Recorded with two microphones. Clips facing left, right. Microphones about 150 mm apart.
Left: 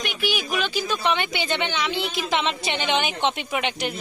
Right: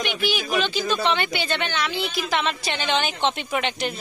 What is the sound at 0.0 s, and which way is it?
Speech, 10° left (ahead or behind).